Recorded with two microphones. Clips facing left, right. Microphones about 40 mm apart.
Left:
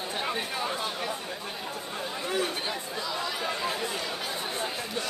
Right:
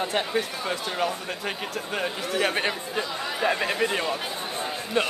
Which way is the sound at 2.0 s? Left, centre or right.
Right.